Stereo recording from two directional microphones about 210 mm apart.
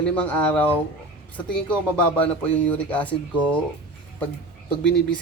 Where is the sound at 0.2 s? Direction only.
5° left (ahead or behind).